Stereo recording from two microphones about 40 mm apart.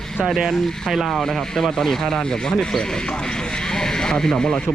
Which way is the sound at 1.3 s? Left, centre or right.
Centre.